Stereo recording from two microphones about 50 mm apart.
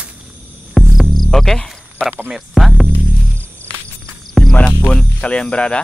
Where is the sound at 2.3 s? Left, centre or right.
Centre.